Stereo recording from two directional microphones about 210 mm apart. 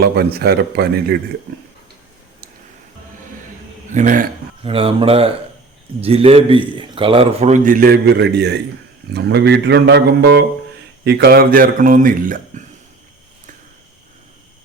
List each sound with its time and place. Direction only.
0.0 s speech: 50° right (ahead or behind)
3.8 s a man's voice: 40° right (ahead or behind)
4.6 s a man's voice: 25° right (ahead or behind); by 12.6 s 40° right (ahead or behind)